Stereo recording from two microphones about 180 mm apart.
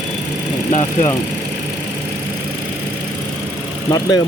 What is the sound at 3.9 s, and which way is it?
Speech, 20° left (ahead or behind).